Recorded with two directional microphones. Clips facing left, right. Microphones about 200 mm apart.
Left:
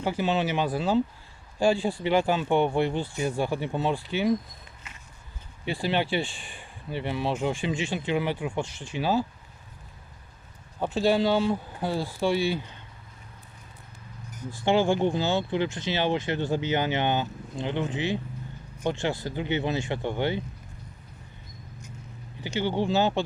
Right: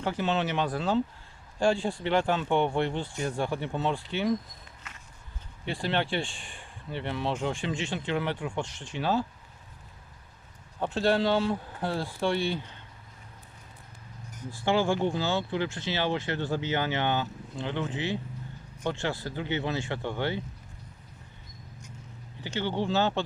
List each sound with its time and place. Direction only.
0.0 s speech: 10° left (ahead or behind)
5.6 s speech: 5° left (ahead or behind)
10.8 s speech: 5° left (ahead or behind)
14.5 s speech: 20° left (ahead or behind)
22.4 s speech: 10° left (ahead or behind)